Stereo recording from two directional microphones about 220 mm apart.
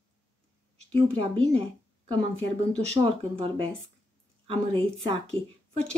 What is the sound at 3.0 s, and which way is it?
Speech, 25° right (ahead or behind).